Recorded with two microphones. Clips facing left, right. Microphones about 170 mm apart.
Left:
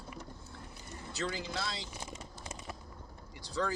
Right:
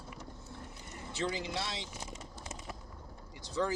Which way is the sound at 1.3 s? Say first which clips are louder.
Right 3 dB; 20° right (ahead or behind).